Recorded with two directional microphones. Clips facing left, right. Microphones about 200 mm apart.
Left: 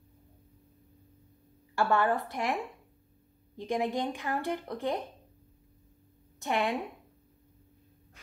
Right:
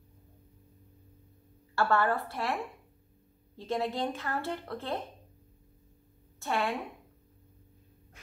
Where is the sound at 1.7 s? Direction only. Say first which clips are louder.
Left 1 dB; 15° left (ahead or behind).